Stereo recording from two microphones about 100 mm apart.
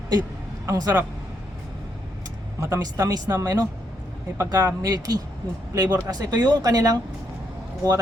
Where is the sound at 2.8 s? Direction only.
40° right (ahead or behind).